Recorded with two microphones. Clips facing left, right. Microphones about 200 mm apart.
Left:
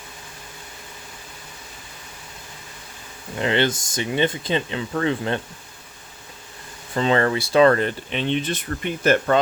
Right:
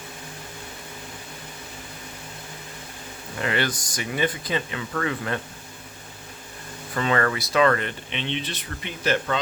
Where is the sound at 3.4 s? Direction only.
25° left (ahead or behind).